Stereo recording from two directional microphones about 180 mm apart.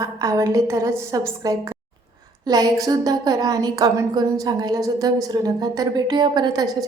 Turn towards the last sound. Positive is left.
turn(degrees=-20)  # may be behind; listen again after turning